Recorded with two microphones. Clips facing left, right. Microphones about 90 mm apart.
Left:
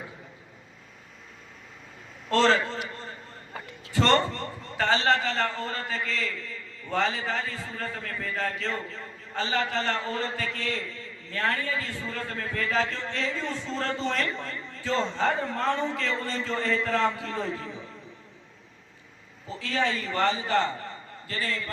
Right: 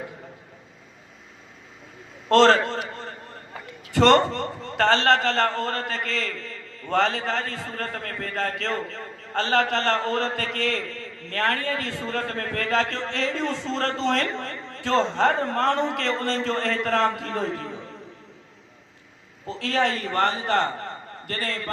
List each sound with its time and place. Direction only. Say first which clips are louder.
2.3 s a man's voice: right 6 dB; 75° right (ahead or behind)
2.9 s a sound: right 4 dB; 65° right (ahead or behind)
3.9 s a man's voice: right 6 dB; 70° right (ahead or behind)
19.5 s a man's voice: right 4 dB; 75° right (ahead or behind); by 21.7 s 60° right (ahead or behind)